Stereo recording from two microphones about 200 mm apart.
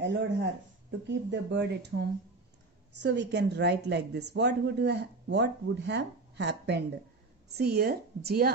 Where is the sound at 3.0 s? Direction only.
60° right (ahead or behind).